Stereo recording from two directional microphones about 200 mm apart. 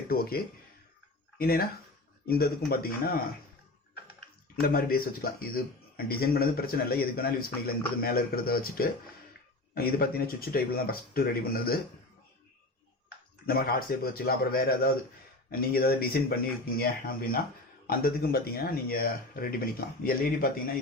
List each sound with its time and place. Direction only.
0.1 s a man's voice: 50° left (ahead or behind)
4.6 s a man's voice: 50° left (ahead or behind)
13.5 s a man's voice: 50° left (ahead or behind)